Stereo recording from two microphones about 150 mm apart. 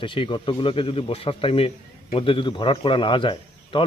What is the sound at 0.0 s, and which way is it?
A man's voice, 35° left (ahead or behind).